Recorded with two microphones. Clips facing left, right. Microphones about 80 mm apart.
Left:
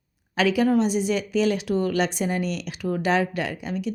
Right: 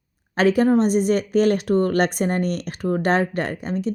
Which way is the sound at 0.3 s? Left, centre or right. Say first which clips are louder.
Right 3 dB; right.